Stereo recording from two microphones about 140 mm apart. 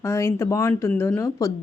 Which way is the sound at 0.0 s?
20° left (ahead or behind).